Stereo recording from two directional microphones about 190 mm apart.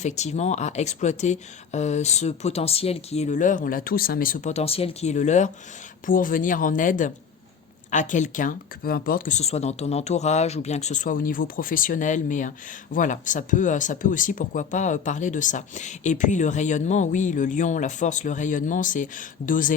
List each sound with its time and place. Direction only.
0.0 s speech: 35° left (ahead or behind)